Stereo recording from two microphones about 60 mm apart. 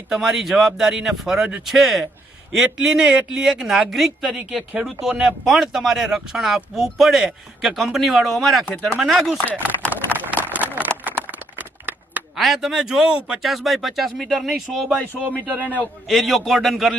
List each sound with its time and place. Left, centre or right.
0.1 s speech: centre
9.5 s speech: right
9.9 s run: right
10.8 s a sound: right
12.4 s speech: centre
15.2 s speech: right
16.0 s speech: centre